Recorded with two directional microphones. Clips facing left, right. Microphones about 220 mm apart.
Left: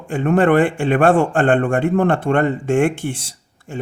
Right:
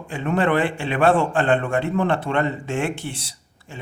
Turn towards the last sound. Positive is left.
turn(degrees=50)  # may be behind; listen again after turning